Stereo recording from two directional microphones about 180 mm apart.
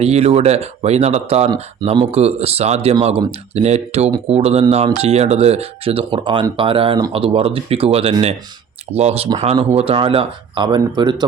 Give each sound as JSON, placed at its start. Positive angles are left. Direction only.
{"t": 0.0, "sound": "speech", "side_deg": -35}